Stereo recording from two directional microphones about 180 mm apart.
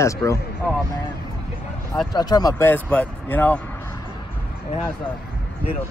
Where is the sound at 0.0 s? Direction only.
15° left (ahead or behind).